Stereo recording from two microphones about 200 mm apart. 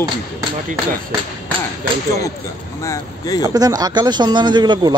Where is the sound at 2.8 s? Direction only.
15° left (ahead or behind).